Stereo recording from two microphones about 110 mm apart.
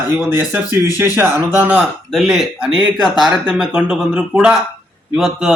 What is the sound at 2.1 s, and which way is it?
Speech, centre (ahead or behind).